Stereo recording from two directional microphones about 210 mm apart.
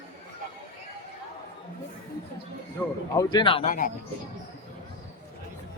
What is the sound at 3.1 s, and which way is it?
Speech, 20° left (ahead or behind).